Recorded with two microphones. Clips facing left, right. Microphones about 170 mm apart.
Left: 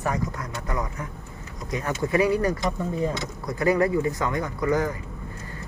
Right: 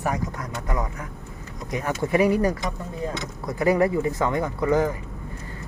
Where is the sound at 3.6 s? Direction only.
20° right (ahead or behind).